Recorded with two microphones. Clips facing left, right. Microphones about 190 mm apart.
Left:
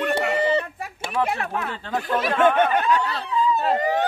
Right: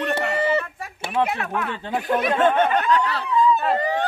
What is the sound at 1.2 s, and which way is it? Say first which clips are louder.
Speech: right 1 dB; 25° right (ahead or behind).